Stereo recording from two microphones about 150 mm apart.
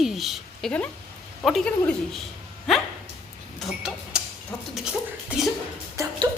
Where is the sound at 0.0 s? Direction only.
Centre (ahead or behind).